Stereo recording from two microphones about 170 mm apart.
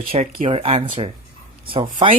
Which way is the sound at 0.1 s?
35° right (ahead or behind).